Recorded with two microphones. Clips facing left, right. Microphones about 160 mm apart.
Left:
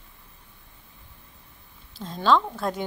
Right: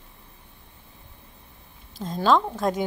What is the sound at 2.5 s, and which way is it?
Speech, 10° right (ahead or behind).